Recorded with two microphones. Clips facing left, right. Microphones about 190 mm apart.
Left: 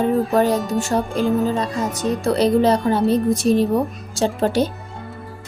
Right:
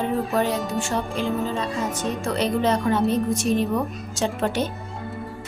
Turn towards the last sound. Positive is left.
turn(degrees=35)  # may be behind; listen again after turning